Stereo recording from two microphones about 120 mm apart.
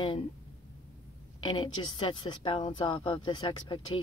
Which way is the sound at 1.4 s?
45° left (ahead or behind).